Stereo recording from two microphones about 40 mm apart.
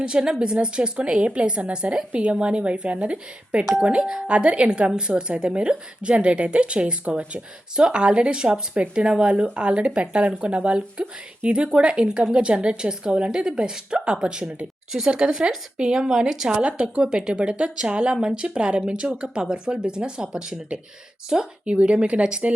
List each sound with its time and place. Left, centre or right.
0.0 s a woman's voice: right
16.6 s a woman's voice: right
21.7 s a woman's voice: right